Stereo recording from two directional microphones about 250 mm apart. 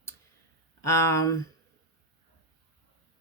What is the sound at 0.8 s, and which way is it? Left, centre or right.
Speech, centre.